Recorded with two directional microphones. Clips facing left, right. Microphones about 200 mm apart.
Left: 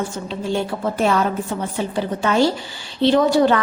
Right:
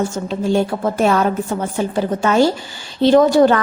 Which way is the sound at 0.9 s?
45° right (ahead or behind).